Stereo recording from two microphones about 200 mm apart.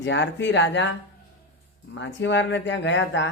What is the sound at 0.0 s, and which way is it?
Speech, 65° left (ahead or behind).